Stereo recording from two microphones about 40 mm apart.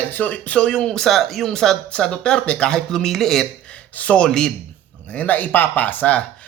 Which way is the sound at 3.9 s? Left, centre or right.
Left.